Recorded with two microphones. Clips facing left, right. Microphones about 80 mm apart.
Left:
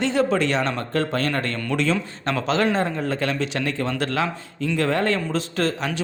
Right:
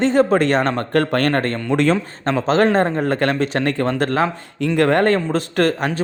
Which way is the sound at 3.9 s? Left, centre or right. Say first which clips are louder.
Right 5 dB; right.